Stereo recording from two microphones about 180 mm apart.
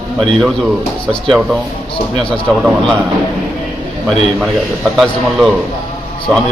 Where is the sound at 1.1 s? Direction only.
Centre (ahead or behind).